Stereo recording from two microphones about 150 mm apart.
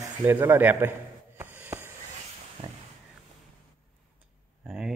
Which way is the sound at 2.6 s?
45° right (ahead or behind).